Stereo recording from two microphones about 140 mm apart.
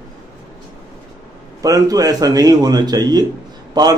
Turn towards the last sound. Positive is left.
turn(degrees=-30)  # may be behind; listen again after turning